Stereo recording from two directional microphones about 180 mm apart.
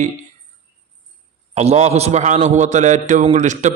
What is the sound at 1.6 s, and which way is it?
A man's voice, 35° right (ahead or behind).